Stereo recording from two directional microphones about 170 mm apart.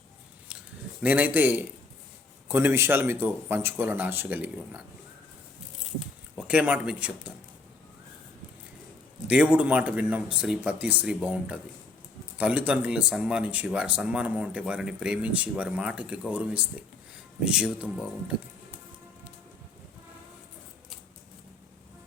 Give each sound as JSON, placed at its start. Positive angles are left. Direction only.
{"t": 1.0, "sound": "speech", "side_deg": -10}
{"t": 6.3, "sound": "speech", "side_deg": -5}
{"t": 9.2, "sound": "speech", "side_deg": -5}